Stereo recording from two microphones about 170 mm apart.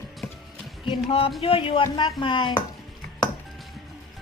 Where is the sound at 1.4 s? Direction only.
30° left (ahead or behind).